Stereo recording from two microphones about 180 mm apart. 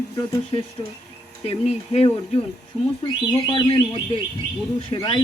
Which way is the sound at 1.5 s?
35° left (ahead or behind).